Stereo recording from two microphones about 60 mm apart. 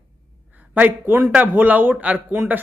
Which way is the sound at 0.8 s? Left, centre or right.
Right.